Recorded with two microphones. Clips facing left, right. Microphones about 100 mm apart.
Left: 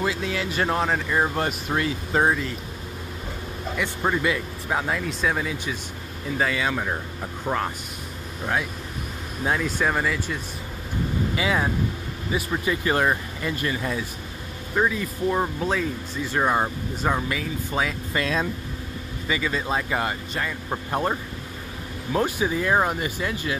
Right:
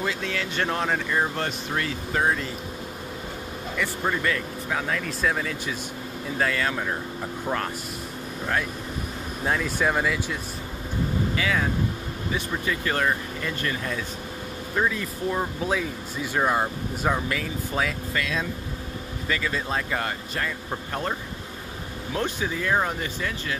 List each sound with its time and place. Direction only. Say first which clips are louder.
0.0 s speech: left 3 dB; 15° left (ahead or behind)
1.1 s speech: left 2 dB; 15° left (ahead or behind)
3.7 s speech: left 2 dB; 15° left (ahead or behind)
5.0 s speech: left 1 dB; 5° left (ahead or behind)
9.4 s speech: left 1 dB; 5° left (ahead or behind)
11.3 s speech: left 3 dB; 20° left (ahead or behind)
12.6 s speech: left 3 dB; 20° left (ahead or behind)
15.6 s speech: left 1 dB; 5° right (ahead or behind)
19.2 s speech: left 2 dB; 5° left (ahead or behind)
20.7 s speech: left 6 dB; 20° left (ahead or behind)